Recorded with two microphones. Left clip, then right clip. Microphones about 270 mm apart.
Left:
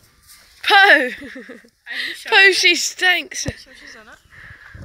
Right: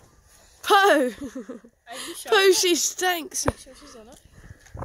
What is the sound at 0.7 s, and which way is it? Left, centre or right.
Speech, centre.